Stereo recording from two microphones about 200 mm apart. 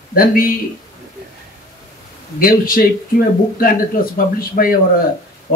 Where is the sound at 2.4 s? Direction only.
45° left (ahead or behind).